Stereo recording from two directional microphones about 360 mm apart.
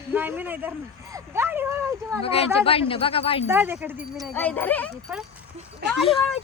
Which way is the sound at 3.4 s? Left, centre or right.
Centre.